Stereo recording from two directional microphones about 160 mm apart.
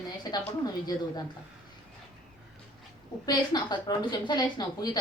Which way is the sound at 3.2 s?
25° left (ahead or behind).